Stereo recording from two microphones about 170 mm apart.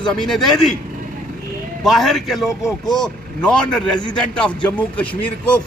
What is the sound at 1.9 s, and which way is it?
A man's voice, centre (ahead or behind).